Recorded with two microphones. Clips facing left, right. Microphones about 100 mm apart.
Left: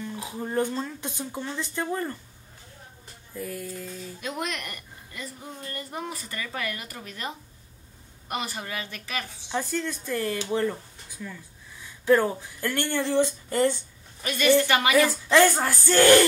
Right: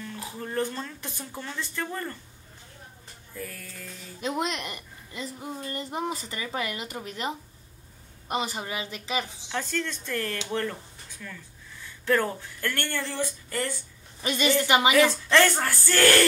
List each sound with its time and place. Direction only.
0.0 s speech: 15° left (ahead or behind)
3.3 s speech: 15° left (ahead or behind)
4.2 s a woman's voice: 20° right (ahead or behind)
9.5 s speech: 15° left (ahead or behind)
14.2 s a woman's voice: 20° right (ahead or behind)
15.0 s speech: 10° left (ahead or behind)